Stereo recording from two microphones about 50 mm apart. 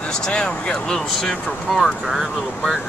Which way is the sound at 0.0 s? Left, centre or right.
Centre.